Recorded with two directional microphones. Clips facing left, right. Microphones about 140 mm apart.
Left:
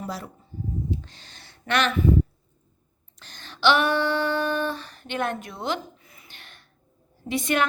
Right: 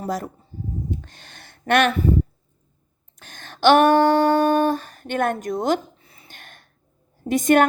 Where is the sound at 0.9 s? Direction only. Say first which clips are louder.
Even; 50° right (ahead or behind).